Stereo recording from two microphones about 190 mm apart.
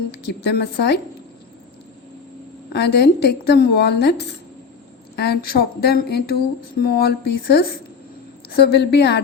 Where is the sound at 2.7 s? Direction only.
60° left (ahead or behind).